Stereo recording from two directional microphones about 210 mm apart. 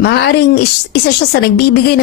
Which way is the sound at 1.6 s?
50° left (ahead or behind).